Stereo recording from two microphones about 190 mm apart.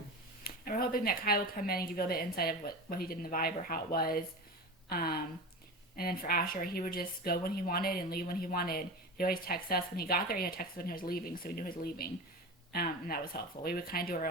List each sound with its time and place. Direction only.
0.4 s speech: 50° left (ahead or behind)